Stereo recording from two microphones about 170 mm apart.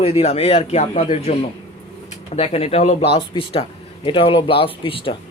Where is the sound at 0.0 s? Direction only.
40° left (ahead or behind).